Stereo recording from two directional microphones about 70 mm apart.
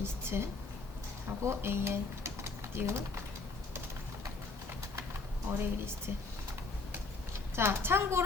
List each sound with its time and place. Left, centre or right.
0.0 s a sound: right
1.3 s speech: right
5.5 s a woman's voice: right
7.5 s a woman's voice: right